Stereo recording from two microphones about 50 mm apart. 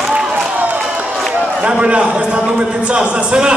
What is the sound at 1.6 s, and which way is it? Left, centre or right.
A man's voice, right.